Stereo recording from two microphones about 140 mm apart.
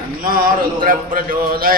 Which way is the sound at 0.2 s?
90° right.